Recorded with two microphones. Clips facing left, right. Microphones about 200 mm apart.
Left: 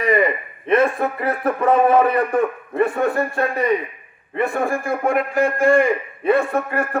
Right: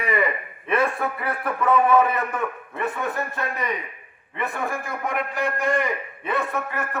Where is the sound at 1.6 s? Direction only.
30° left (ahead or behind).